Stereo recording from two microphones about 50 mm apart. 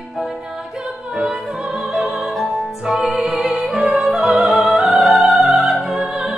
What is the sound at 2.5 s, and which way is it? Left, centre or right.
Music, centre.